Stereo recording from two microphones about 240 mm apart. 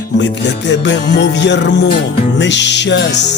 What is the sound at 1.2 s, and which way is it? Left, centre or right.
Music, left.